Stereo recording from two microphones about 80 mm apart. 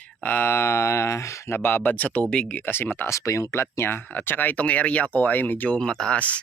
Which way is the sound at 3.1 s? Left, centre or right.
Left.